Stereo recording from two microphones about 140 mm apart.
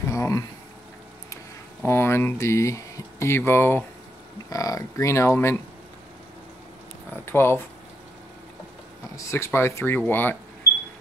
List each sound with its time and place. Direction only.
0.0 s a sound: 20° left (ahead or behind)
1.9 s speech: 15° left (ahead or behind)
7.2 s speech: 15° left (ahead or behind)
9.1 s speech: 20° left (ahead or behind)